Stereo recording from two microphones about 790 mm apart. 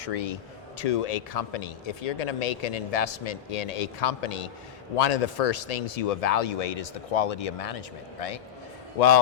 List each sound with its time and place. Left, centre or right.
0.0 s speech: left
9.0 s a man's voice: left